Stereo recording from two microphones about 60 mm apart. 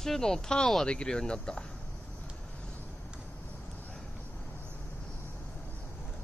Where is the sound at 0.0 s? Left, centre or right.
Centre.